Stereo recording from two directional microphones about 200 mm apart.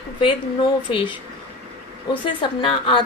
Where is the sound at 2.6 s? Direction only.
25° left (ahead or behind).